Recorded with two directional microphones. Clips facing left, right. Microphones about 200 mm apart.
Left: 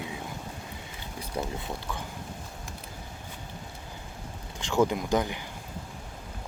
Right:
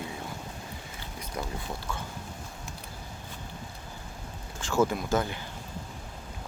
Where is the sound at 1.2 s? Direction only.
20° left (ahead or behind).